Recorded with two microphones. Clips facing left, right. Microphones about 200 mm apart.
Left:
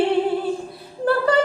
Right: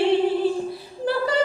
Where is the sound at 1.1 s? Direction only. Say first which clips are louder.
Left 5 dB; 55° left (ahead or behind).